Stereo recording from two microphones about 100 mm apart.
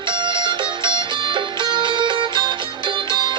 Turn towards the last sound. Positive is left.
turn(degrees=-50)  # may be behind; listen again after turning